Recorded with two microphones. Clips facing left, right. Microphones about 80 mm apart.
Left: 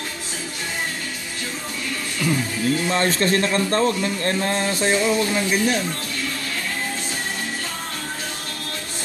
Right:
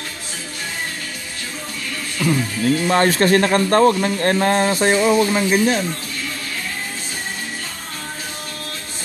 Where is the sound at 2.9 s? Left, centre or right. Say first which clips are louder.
Right 7 dB; right.